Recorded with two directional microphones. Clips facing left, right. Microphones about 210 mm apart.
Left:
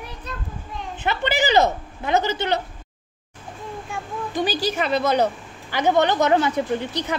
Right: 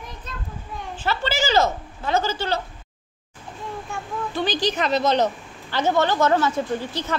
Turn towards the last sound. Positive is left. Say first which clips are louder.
# left 1 dB
turn(degrees=15)  # may be behind; listen again after turning